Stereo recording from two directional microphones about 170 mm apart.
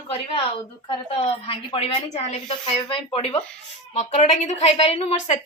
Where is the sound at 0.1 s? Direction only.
30° left (ahead or behind).